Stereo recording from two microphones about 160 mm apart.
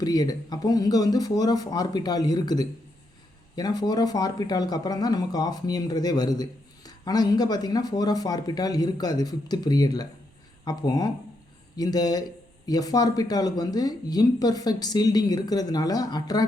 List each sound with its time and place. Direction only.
0.0 s speech: 25° left (ahead or behind)